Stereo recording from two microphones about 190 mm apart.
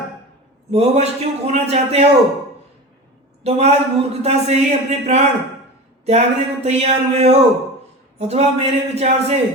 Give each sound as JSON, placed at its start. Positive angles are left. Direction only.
{"t": 0.7, "sound": "speech", "side_deg": -35}
{"t": 3.4, "sound": "speech", "side_deg": -35}